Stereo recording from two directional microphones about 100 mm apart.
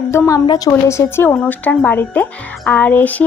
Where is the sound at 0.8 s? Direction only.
30° left (ahead or behind).